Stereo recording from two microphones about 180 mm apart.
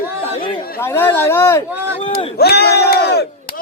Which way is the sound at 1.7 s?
10° right (ahead or behind).